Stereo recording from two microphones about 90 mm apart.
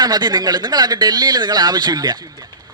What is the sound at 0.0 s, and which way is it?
A man's voice, 50° right (ahead or behind).